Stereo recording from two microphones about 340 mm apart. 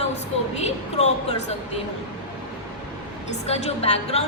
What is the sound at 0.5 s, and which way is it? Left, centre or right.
A woman's voice, centre.